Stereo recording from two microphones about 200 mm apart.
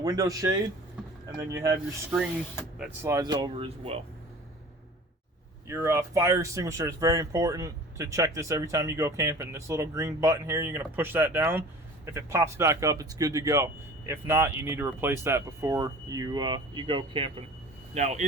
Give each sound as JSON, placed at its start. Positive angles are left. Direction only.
{"t": 0.0, "sound": "speech", "side_deg": -20}
{"t": 3.0, "sound": "speech", "side_deg": -15}
{"t": 5.6, "sound": "speech", "side_deg": -15}